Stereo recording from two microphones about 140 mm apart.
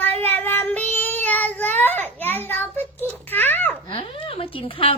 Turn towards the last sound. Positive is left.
turn(degrees=40)  # may be behind; listen again after turning